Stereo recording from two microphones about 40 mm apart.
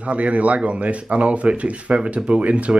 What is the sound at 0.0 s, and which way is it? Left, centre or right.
Speech, right.